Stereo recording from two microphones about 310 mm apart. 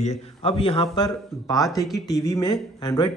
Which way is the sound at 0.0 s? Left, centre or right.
Centre.